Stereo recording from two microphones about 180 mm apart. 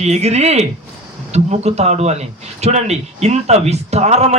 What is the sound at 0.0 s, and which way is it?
Speech, 35° right (ahead or behind).